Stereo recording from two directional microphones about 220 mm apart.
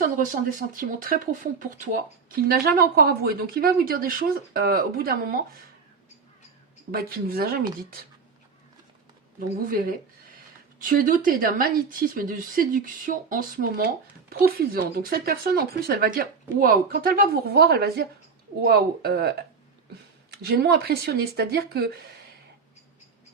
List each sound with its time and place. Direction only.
0.0 s speech: 35° right (ahead or behind)
6.9 s speech: 45° right (ahead or behind)
9.6 s speech: 40° right (ahead or behind)
20.3 s speech: 45° right (ahead or behind)